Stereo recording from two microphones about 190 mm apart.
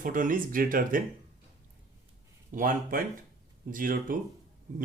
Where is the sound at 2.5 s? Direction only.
45° right (ahead or behind).